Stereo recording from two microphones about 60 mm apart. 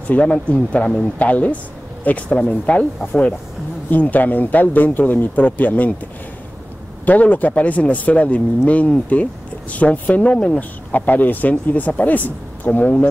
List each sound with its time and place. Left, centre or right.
0.1 s speech: left
7.1 s speech: left